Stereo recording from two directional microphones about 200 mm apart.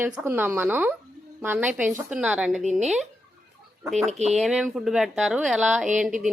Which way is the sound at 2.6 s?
35° right (ahead or behind).